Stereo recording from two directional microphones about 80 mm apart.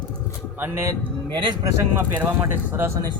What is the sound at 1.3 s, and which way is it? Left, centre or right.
Speech, right.